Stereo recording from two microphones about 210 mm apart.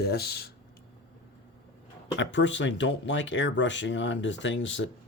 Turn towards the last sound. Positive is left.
turn(degrees=60)  # may be behind; listen again after turning